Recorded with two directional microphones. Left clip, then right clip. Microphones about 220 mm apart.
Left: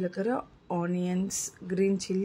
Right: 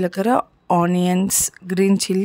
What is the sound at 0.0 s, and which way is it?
Speech, 50° right (ahead or behind).